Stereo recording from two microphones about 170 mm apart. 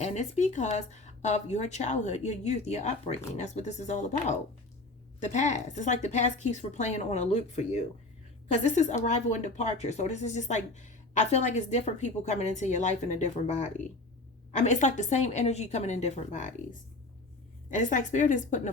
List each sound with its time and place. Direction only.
0.0 s speech: 45° left (ahead or behind)
17.7 s speech: 50° left (ahead or behind)